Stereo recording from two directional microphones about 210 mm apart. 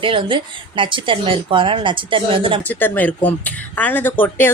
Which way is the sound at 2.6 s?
10° left (ahead or behind).